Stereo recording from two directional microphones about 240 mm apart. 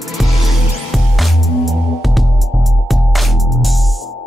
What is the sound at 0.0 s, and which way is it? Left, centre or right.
Music, centre.